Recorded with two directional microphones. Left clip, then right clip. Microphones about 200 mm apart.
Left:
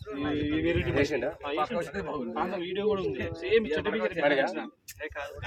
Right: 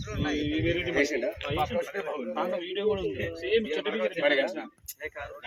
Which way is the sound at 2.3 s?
5° right (ahead or behind).